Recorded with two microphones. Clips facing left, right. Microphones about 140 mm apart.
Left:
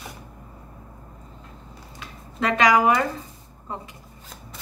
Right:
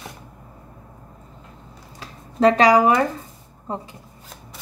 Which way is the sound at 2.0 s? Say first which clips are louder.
Right 10 dB; 35° right (ahead or behind).